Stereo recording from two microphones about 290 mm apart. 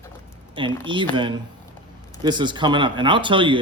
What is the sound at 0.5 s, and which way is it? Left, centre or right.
Speech, centre.